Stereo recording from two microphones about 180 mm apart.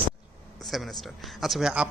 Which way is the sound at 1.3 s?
Centre (ahead or behind).